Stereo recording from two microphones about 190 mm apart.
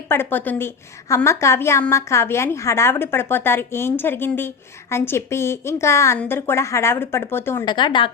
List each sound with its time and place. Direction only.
0.1 s a woman's voice: 10° left (ahead or behind)
7.6 s speech: 25° left (ahead or behind)